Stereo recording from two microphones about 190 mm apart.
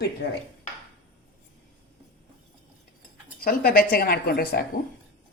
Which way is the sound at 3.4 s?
50° left (ahead or behind).